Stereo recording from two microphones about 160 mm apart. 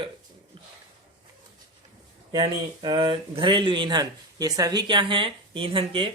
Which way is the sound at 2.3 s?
25° right (ahead or behind).